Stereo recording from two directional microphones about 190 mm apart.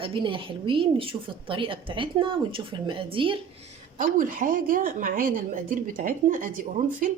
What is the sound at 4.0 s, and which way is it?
A woman's voice, 40° right (ahead or behind).